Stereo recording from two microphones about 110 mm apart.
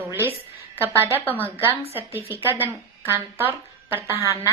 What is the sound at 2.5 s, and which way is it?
Speech, 20° right (ahead or behind).